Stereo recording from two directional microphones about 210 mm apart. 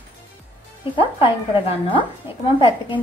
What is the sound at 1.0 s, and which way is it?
Speech, 25° left (ahead or behind).